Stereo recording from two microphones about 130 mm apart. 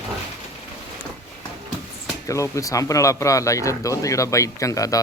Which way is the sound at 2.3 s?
25° left (ahead or behind).